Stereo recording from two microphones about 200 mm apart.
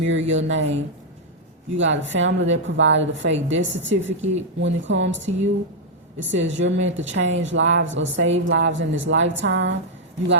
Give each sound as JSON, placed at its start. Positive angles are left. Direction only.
{"t": 0.0, "sound": "a woman's voice", "side_deg": -70}
{"t": 6.3, "sound": "a woman's voice", "side_deg": -65}